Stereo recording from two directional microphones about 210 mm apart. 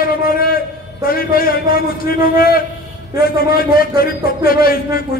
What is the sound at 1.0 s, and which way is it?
A man's voice, 45° left (ahead or behind).